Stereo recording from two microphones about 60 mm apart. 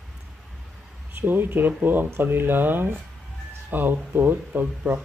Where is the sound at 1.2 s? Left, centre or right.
Right.